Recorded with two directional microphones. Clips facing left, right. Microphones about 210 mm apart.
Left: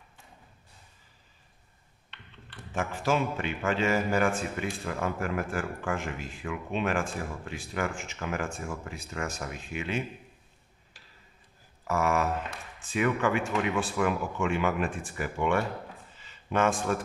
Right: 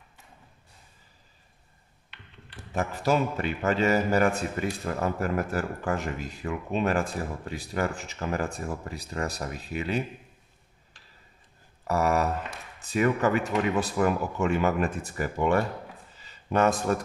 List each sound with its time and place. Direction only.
2.7 s a man's voice: 40° right (ahead or behind)
11.9 s a man's voice: 35° right (ahead or behind)
16.2 s a sound: 40° right (ahead or behind)